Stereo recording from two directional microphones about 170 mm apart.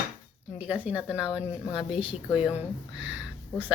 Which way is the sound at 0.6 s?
10° right (ahead or behind).